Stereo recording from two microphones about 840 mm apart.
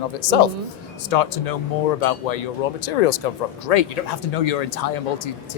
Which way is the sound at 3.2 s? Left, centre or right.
Left.